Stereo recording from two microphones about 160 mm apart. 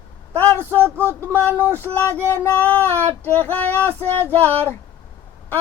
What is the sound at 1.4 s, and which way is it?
Female singing, 10° left (ahead or behind).